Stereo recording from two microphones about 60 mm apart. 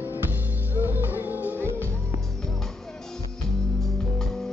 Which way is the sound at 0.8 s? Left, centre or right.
Right.